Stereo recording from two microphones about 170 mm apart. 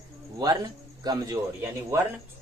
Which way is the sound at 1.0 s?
20° right (ahead or behind).